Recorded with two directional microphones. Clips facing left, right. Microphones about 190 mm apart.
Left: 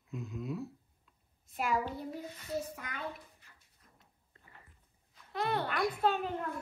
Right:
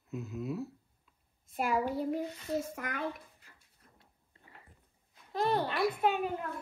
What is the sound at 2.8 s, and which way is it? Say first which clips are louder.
Speech: right 6 dB; 50° right (ahead or behind).